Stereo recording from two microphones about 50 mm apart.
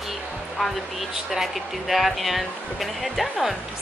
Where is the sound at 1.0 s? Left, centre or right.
Centre.